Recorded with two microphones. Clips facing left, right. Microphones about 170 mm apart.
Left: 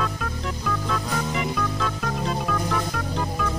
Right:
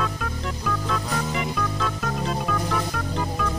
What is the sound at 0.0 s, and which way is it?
Music, centre (ahead or behind).